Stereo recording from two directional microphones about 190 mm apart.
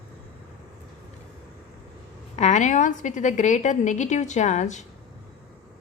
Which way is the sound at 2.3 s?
40° left (ahead or behind).